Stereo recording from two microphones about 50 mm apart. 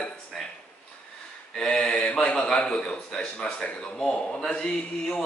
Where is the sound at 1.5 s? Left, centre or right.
Centre.